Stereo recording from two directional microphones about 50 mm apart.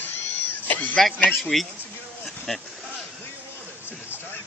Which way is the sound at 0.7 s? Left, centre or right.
Left.